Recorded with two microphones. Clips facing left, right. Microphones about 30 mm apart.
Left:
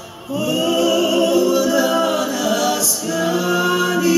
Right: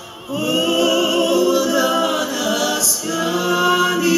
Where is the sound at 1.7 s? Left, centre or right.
Centre.